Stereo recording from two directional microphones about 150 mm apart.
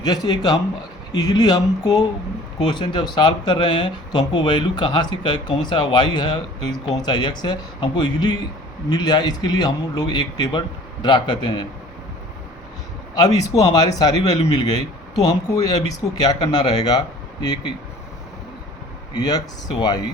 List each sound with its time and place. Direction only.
0.0 s speech: 25° left (ahead or behind)
13.1 s speech: 25° left (ahead or behind)
19.1 s speech: 25° left (ahead or behind)